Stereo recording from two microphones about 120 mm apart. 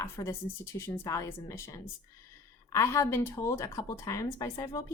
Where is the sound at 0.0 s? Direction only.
20° left (ahead or behind).